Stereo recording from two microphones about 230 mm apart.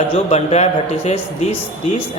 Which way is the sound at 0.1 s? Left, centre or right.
Left.